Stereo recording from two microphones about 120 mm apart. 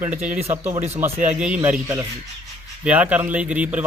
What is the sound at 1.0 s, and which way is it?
Speech, 10° right (ahead or behind).